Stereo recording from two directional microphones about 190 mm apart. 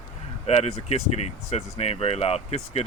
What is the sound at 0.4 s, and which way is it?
Speech, 35° left (ahead or behind).